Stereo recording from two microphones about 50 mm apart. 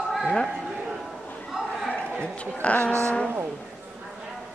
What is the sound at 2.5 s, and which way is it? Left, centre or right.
Speech, left.